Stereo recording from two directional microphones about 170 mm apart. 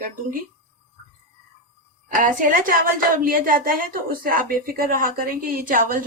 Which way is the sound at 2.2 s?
50° right (ahead or behind).